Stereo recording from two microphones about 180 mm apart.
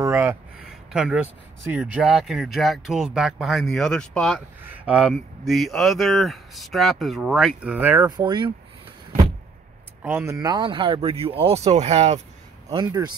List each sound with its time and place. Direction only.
0.0 s a sound: 15° right (ahead or behind)
1.6 s speech: 10° right (ahead or behind)
4.6 s speech: 10° right (ahead or behind)
8.1 s speech: 25° right (ahead or behind)
10.0 s speech: 15° right (ahead or behind); by 12.2 s 35° right (ahead or behind)
12.7 s speech: 20° right (ahead or behind)